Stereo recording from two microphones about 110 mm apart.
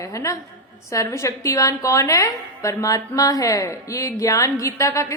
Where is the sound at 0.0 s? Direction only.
30° left (ahead or behind).